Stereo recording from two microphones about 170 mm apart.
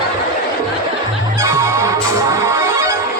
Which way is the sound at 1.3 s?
20° right (ahead or behind).